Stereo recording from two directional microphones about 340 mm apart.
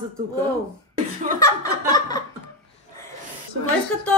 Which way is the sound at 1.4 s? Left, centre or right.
Centre.